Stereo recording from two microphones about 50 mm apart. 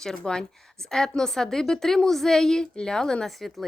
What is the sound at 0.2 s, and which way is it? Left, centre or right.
A woman's voice, centre.